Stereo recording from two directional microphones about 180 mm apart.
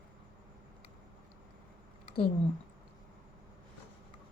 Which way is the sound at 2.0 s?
30° left (ahead or behind).